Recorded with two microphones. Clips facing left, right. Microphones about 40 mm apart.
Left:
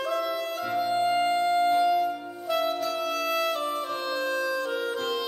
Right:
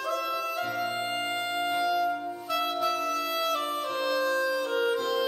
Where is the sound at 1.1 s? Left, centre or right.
Centre.